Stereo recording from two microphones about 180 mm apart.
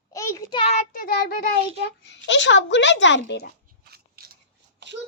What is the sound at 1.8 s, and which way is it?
A child's voice, 75° left (ahead or behind).